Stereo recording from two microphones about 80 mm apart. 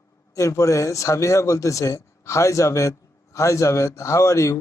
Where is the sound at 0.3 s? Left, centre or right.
Left.